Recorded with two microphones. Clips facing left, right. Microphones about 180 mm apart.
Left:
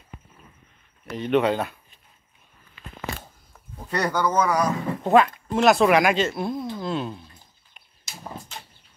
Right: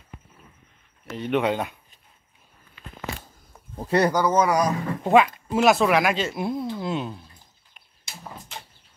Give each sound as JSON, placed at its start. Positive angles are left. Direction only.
{"t": 1.2, "sound": "speech", "side_deg": -10}
{"t": 3.7, "sound": "speech", "side_deg": -30}
{"t": 4.1, "sound": "speech", "side_deg": -10}